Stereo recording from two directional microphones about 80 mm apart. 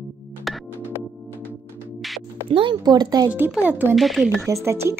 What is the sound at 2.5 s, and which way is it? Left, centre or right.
Speech, right.